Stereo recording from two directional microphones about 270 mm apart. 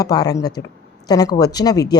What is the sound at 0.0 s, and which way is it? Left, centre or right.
A woman's voice, centre.